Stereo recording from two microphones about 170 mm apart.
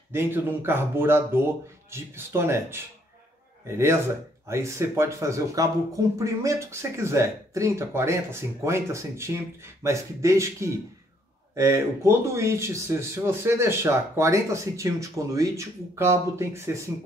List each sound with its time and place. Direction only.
0.1 s speech: 15° right (ahead or behind)